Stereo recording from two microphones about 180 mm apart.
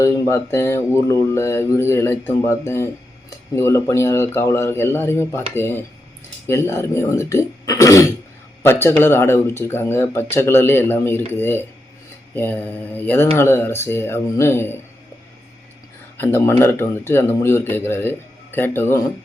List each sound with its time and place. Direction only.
0.0 s speech: 15° left (ahead or behind)
16.1 s speech: 15° left (ahead or behind)